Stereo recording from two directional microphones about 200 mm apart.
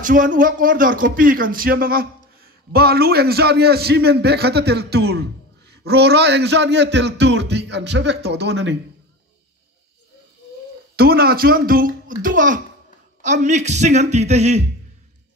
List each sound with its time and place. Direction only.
0.0 s a man's voice: 40° right (ahead or behind); by 8.7 s 60° right (ahead or behind)
11.0 s a man's voice: 50° right (ahead or behind); by 14.6 s 35° right (ahead or behind)